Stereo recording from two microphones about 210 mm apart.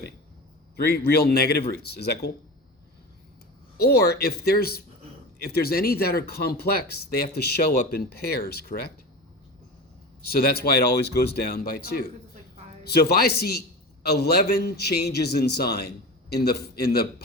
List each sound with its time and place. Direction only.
0.9 s speech: 50° left (ahead or behind)
3.8 s speech: 50° left (ahead or behind)
10.2 s speech: 45° left (ahead or behind)